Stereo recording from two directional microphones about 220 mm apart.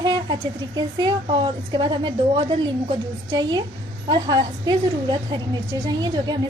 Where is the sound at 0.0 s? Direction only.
20° right (ahead or behind).